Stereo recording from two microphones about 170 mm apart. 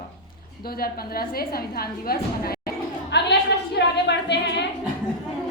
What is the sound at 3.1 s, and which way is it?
A woman's voice, 85° left.